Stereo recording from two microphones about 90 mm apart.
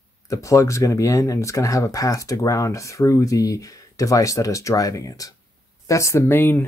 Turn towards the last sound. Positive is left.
turn(degrees=25)  # may be behind; listen again after turning